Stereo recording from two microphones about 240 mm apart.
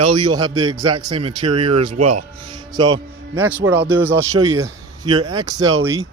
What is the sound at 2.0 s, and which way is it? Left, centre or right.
Speech, right.